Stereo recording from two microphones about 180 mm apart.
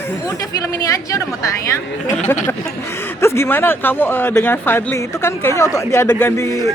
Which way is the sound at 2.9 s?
15° left (ahead or behind).